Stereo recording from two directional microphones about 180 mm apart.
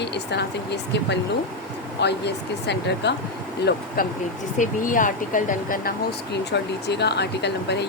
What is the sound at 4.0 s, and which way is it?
Speech, 50° left (ahead or behind).